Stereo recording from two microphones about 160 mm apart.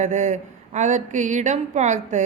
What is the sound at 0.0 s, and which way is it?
Speech, 50° right (ahead or behind).